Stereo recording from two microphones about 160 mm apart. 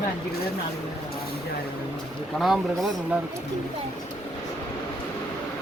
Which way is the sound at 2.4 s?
Centre (ahead or behind).